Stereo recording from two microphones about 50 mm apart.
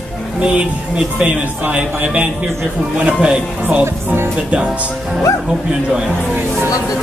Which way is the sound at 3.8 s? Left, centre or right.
Right.